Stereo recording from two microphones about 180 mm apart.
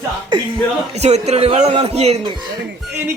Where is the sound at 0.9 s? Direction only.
35° right (ahead or behind).